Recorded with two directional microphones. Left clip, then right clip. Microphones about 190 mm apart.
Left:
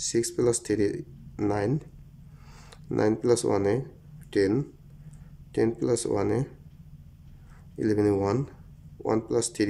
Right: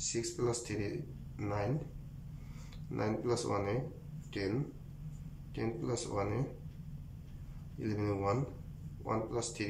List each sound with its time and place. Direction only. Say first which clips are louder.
0.0 s speech: left 11 dB; 40° left (ahead or behind)
2.9 s speech: left 12 dB; 40° left (ahead or behind)
5.5 s speech: left 13 dB; 40° left (ahead or behind)
7.8 s speech: left 12 dB; 40° left (ahead or behind)